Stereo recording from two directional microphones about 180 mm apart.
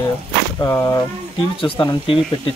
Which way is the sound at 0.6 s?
15° left (ahead or behind).